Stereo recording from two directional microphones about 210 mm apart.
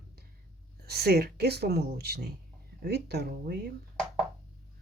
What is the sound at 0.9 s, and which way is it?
Speech, 50° right (ahead or behind).